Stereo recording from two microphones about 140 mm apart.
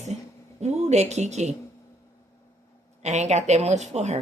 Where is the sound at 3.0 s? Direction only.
55° right (ahead or behind).